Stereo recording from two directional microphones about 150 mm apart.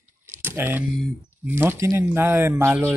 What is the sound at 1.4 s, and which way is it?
Speech, 15° right (ahead or behind).